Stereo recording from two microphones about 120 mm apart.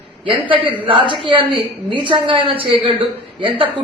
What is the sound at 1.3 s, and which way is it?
A woman's voice, 45° right (ahead or behind).